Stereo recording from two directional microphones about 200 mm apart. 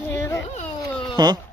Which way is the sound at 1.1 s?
20° right (ahead or behind).